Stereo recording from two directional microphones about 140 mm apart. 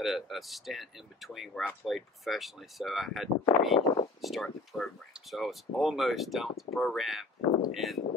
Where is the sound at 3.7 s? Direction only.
30° left (ahead or behind).